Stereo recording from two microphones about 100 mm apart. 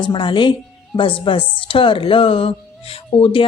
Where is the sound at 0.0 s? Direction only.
50° left (ahead or behind).